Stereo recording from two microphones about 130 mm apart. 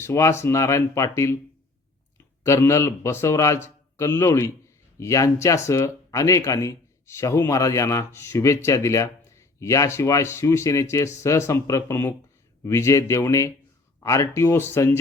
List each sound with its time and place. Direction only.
0.0 s speech: 20° left (ahead or behind)
2.4 s speech: 20° left (ahead or behind)